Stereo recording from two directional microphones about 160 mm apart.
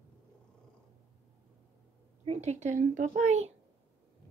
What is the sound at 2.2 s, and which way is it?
A child's voice, 45° right (ahead or behind).